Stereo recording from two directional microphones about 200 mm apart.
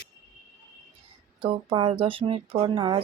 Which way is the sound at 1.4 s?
25° right (ahead or behind).